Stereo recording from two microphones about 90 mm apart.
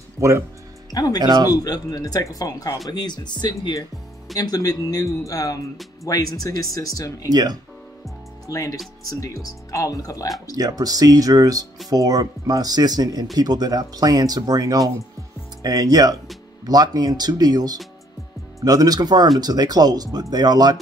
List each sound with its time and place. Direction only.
0.2 s speech: 35° right (ahead or behind)
0.9 s speech: 45° left (ahead or behind)
4.4 s speech: 45° left (ahead or behind)
7.2 s speech: 45° right (ahead or behind)
8.5 s speech: 40° left (ahead or behind)
10.5 s speech: 45° right (ahead or behind)